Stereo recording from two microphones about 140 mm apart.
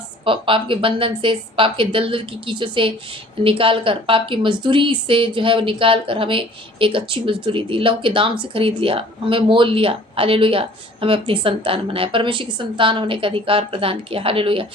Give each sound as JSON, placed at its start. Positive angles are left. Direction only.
{"t": 0.3, "sound": "a woman's voice", "side_deg": -40}